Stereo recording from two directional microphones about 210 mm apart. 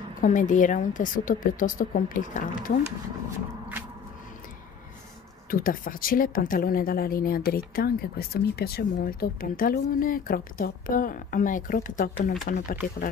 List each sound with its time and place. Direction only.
0.2 s a woman's voice: 35° left (ahead or behind)
5.5 s a woman's voice: 40° left (ahead or behind)